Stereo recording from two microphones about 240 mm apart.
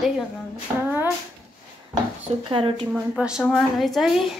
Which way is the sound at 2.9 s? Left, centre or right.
Centre.